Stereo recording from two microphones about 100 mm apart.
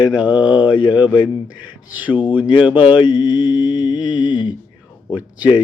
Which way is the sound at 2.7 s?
55° left (ahead or behind).